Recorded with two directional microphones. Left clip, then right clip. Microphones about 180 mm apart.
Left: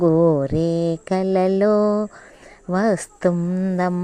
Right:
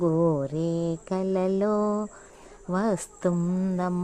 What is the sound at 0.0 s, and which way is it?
Mantra, 20° left (ahead or behind).